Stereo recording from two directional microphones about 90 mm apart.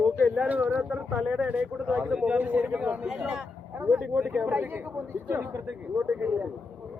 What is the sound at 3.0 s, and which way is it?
Speech, 5° right (ahead or behind).